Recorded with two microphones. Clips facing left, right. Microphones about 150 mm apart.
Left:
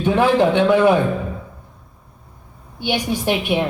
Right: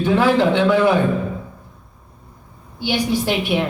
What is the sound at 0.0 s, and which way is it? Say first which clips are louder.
Speech: even; 15° left (ahead or behind).